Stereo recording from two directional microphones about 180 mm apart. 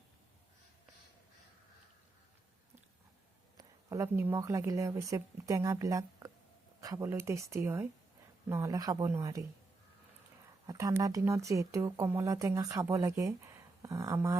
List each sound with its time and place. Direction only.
3.6 s a woman's voice: 15° right (ahead or behind)
10.7 s a woman's voice: 20° right (ahead or behind)